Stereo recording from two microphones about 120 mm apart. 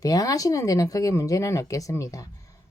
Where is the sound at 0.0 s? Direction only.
30° left (ahead or behind).